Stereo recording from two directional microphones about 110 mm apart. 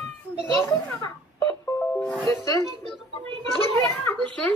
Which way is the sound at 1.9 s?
5° left (ahead or behind).